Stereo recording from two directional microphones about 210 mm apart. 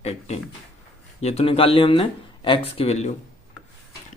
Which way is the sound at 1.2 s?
30° left (ahead or behind).